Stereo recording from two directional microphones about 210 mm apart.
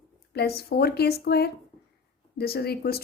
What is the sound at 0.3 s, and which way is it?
Speech, 50° left (ahead or behind).